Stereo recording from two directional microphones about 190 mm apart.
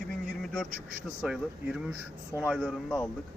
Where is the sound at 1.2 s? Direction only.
5° right (ahead or behind).